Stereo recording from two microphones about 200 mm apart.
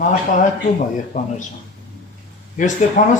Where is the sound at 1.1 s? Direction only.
40° left (ahead or behind).